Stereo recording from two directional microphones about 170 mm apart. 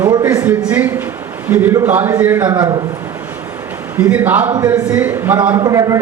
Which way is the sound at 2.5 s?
25° right (ahead or behind).